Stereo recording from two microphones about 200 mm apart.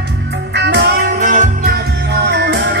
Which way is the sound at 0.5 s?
60° right (ahead or behind).